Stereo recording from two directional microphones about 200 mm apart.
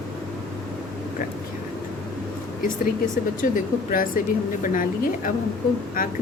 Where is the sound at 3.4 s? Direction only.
40° left (ahead or behind).